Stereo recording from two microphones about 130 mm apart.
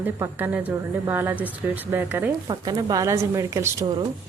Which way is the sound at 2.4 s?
30° right (ahead or behind).